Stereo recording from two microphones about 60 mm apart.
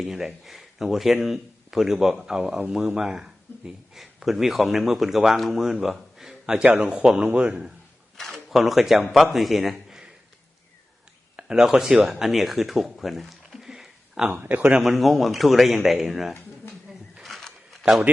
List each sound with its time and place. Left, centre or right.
0.0 s speech: centre
5.8 s a sound: centre
6.7 s a man's voice: right
6.9 s speech: centre
7.3 s a man's voice: right
8.1 s a man's voice: centre
11.3 s speech: centre
12.0 s a sound: centre
14.3 s a man's voice: right
14.8 s speech: centre
17.2 s a sound: centre